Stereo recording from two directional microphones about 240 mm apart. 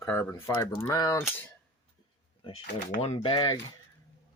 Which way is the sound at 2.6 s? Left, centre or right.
Left.